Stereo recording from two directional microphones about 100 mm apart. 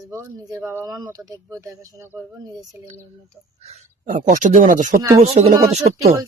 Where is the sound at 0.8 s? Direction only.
40° right (ahead or behind).